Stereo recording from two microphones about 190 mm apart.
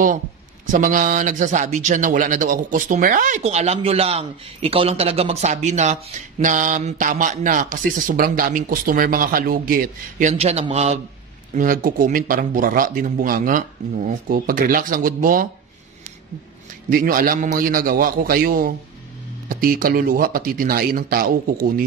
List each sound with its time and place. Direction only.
0.7 s a man's voice: 45° right (ahead or behind)
10.3 s a man's voice: 30° right (ahead or behind)
11.5 s a man's voice: 45° right (ahead or behind)
16.9 s a man's voice: 50° right (ahead or behind)